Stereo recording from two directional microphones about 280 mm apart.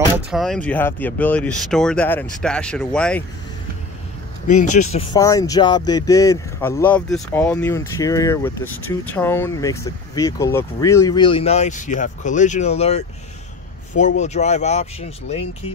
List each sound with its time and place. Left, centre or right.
0.1 s speech: centre
4.7 s speech: centre